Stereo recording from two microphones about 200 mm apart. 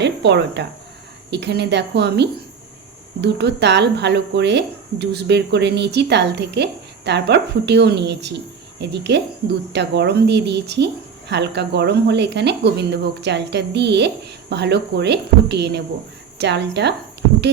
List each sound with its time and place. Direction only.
0.0 s speech: 60° right (ahead or behind)